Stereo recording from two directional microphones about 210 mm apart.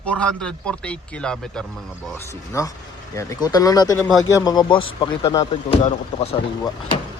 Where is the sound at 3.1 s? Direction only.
15° left (ahead or behind).